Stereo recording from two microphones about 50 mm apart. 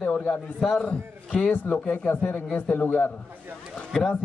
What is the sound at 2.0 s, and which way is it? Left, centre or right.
A man's voice, left.